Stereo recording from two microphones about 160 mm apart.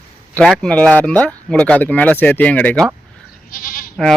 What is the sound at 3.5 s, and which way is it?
Speech, 60° left (ahead or behind).